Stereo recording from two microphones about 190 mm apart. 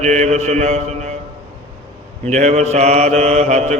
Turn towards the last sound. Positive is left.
turn(degrees=-35)  # may be behind; listen again after turning